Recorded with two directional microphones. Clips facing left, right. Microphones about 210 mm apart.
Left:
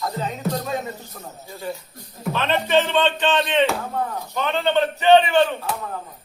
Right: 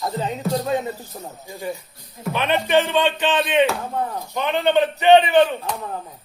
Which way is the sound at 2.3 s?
15° right (ahead or behind).